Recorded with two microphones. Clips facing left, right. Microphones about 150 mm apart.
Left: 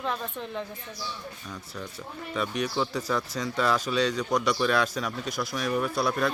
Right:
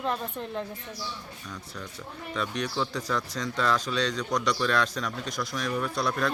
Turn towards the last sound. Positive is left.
turn(degrees=5)  # may be behind; listen again after turning